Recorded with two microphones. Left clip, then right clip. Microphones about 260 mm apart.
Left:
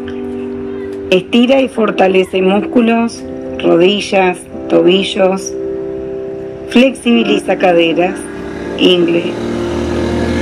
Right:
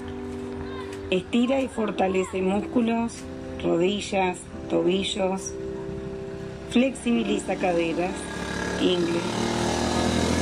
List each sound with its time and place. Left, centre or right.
1.0 s speech: left
6.7 s speech: left